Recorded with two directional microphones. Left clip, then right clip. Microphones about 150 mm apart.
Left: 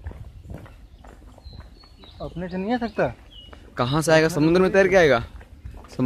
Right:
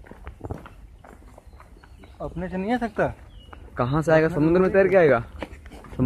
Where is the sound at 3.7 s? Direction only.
20° left (ahead or behind).